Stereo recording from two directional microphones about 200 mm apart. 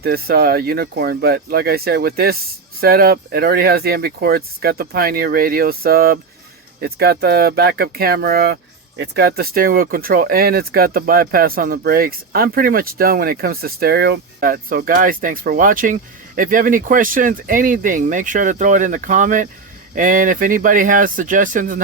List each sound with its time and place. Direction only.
0.0 s speech: 50° right (ahead or behind)